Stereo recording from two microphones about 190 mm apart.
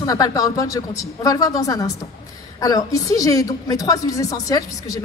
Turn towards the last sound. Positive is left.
turn(degrees=20)  # may be behind; listen again after turning